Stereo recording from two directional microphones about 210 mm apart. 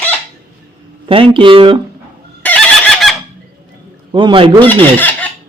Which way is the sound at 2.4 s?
5° left (ahead or behind).